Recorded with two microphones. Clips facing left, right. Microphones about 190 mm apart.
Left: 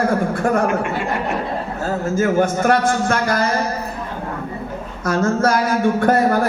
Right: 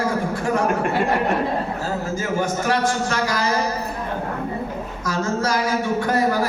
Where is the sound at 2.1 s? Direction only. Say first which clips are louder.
Left 9 dB; 55° left (ahead or behind).